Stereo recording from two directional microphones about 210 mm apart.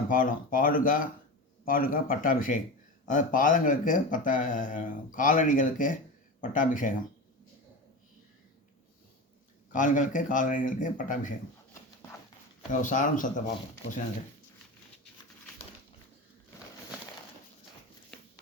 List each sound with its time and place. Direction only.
0.1 s speech: 40° left (ahead or behind)
9.7 s speech: 40° left (ahead or behind)
12.7 s speech: 35° left (ahead or behind)